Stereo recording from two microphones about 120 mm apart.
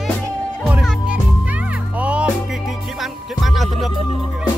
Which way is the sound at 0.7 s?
10° right (ahead or behind).